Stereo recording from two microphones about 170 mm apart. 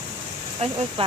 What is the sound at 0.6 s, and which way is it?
Speech, 35° right (ahead or behind).